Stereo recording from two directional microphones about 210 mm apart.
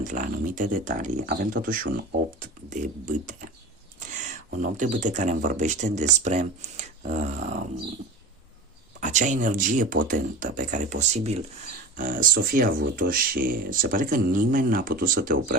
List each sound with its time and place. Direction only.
0.0 s speech: 35° right (ahead or behind)
4.5 s speech: 35° right (ahead or behind)
9.0 s speech: 35° right (ahead or behind)
11.9 s speech: 40° right (ahead or behind)